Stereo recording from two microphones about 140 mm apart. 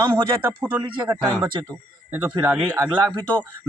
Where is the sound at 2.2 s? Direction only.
20° right (ahead or behind).